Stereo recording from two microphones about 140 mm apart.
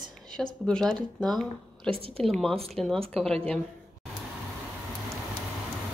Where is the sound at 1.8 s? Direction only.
45° right (ahead or behind).